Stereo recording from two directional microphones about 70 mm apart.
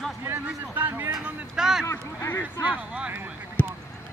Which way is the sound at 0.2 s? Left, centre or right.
Right.